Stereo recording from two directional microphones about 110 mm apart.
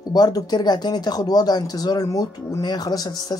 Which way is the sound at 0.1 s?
35° left (ahead or behind).